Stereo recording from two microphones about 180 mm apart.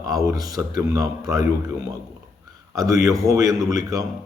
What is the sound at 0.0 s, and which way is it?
Speech, 20° right (ahead or behind).